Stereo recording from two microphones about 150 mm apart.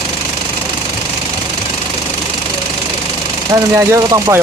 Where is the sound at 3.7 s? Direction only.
20° right (ahead or behind).